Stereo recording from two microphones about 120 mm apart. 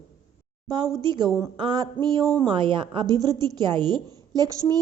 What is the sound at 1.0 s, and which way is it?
A woman's voice, 40° right (ahead or behind).